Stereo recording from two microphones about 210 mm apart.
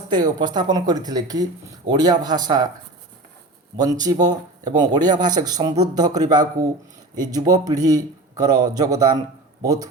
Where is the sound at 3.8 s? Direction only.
20° right (ahead or behind).